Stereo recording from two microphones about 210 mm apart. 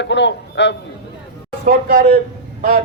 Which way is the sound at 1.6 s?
45° right (ahead or behind).